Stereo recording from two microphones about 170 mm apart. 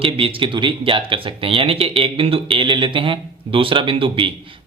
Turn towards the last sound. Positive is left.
turn(degrees=-30)  # may be behind; listen again after turning